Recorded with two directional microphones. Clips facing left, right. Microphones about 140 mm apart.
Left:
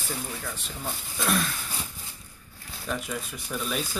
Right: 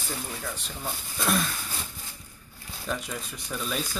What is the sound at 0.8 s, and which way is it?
Speech, centre (ahead or behind).